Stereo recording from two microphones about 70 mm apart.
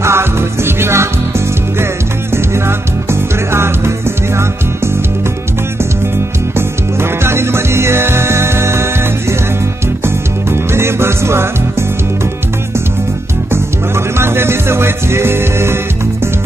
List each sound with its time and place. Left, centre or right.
0.0 s music: right
3.1 s music: right
6.5 s music: right
10.0 s music: right
13.5 s music: right